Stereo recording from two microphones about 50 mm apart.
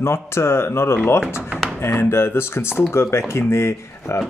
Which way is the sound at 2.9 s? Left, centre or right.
Left.